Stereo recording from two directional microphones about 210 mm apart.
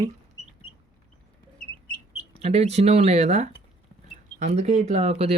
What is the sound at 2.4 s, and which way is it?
Speech, 30° right (ahead or behind).